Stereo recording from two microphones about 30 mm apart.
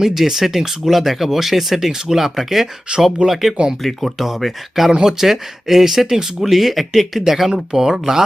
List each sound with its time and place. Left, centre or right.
0.0 s speech: centre
7.5 s speech: right